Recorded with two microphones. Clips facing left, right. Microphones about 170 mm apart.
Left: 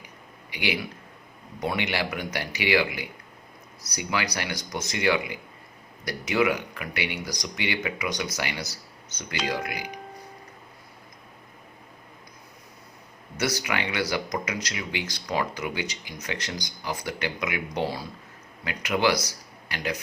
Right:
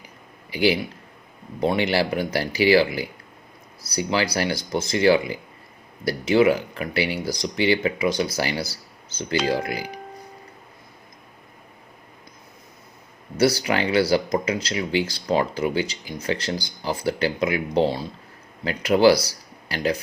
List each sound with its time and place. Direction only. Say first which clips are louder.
0.5 s speech: right 9 dB; 35° right (ahead or behind)
13.3 s speech: right 8 dB; 30° right (ahead or behind)